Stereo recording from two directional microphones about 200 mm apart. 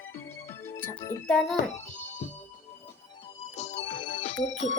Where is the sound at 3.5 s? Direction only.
35° left (ahead or behind).